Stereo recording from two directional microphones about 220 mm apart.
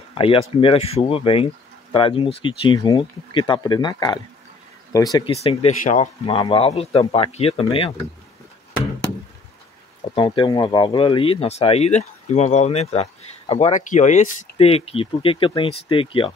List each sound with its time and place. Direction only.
0.1 s speech: 25° left (ahead or behind)
10.1 s speech: 20° left (ahead or behind)